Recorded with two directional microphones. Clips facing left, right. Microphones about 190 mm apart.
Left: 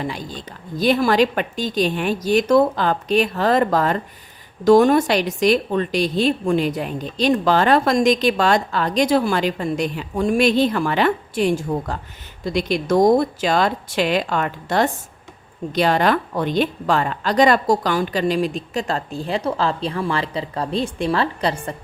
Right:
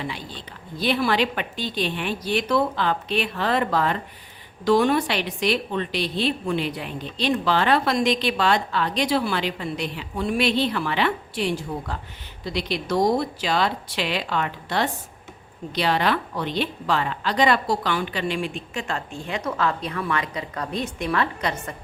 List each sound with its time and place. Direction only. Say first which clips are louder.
0.0 s a woman's voice: left 5 dB; 45° left (ahead or behind)